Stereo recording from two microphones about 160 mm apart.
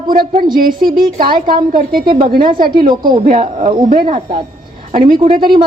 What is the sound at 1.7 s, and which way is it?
Speech, 65° right (ahead or behind).